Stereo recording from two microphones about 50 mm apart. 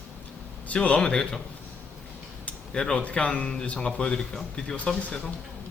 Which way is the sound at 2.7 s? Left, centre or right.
Centre.